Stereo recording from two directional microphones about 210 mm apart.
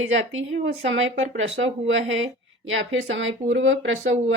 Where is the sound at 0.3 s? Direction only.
65° right (ahead or behind).